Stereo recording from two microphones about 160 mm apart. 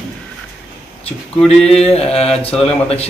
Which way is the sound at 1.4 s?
40° left (ahead or behind).